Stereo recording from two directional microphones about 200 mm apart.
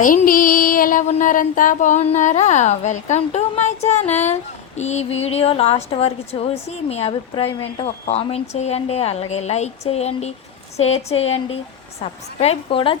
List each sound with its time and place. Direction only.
0.0 s female singing: 45° left (ahead or behind)
5.2 s a woman's voice: 30° left (ahead or behind)
8.0 s female singing: 30° left (ahead or behind)
12.0 s a woman's voice: 30° left (ahead or behind)